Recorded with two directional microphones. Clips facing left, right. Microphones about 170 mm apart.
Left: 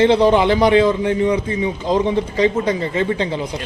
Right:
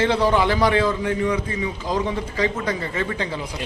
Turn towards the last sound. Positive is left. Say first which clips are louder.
# left 6 dB
turn(degrees=25)  # may be behind; listen again after turning